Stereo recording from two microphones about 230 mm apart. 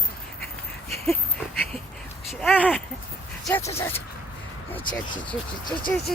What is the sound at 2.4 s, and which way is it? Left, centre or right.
Speech, centre.